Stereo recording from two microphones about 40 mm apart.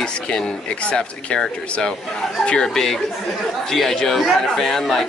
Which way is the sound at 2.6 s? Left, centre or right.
Centre.